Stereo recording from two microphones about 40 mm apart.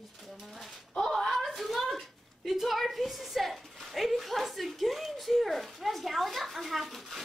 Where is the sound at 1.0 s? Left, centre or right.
Centre.